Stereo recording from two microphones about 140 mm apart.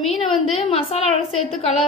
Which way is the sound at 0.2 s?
40° left (ahead or behind).